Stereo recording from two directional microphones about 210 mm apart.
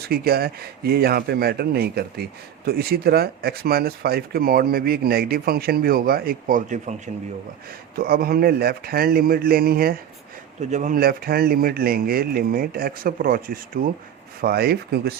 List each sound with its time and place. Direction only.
0.0 s speech: 45° right (ahead or behind)
10.6 s speech: 35° right (ahead or behind)